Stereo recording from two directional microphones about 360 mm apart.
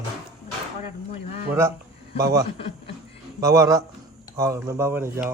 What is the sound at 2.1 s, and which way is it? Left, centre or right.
Speech, right.